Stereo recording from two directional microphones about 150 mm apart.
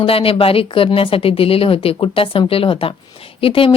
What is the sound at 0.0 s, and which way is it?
Speech, 40° left (ahead or behind).